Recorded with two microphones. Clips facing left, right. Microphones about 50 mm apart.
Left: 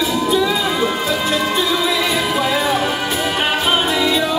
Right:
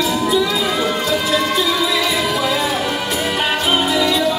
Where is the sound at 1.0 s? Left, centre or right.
Centre.